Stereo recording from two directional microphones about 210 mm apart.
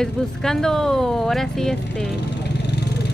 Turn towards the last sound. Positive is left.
turn(degrees=50)  # may be behind; listen again after turning